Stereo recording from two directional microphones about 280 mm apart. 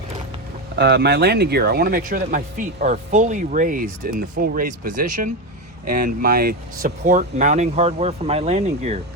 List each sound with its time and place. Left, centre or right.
0.8 s speech: right